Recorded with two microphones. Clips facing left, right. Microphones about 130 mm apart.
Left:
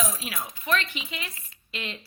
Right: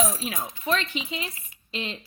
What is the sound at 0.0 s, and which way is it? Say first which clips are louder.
A woman's voice: right 4 dB; 30° right (ahead or behind).